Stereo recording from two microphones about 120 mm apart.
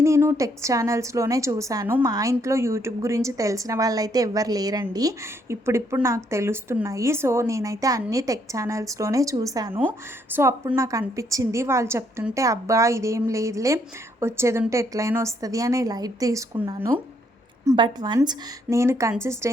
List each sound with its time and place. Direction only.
0.0 s a woman's voice: 25° right (ahead or behind)
17.7 s a woman's voice: 40° right (ahead or behind)
18.2 s a woman's voice: 25° right (ahead or behind)